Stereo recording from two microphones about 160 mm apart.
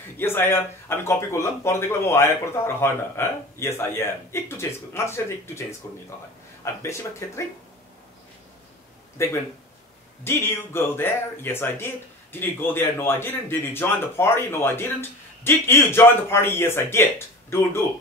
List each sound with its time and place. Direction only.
0.2 s speech: 15° left (ahead or behind)
9.2 s speech: 15° left (ahead or behind)